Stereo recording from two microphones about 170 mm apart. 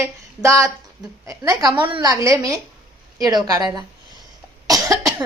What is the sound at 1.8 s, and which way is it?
A woman's voice, 25° right (ahead or behind).